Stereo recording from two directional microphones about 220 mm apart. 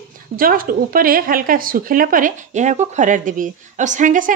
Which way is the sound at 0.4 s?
40° right (ahead or behind).